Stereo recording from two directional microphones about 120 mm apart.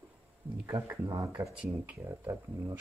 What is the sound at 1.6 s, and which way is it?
Speech, 10° right (ahead or behind).